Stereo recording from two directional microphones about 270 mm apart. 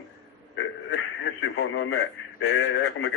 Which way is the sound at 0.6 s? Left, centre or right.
Left.